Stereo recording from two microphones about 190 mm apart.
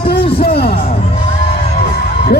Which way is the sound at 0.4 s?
55° left (ahead or behind).